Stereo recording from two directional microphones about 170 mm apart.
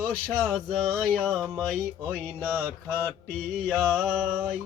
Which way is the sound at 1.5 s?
5° left (ahead or behind).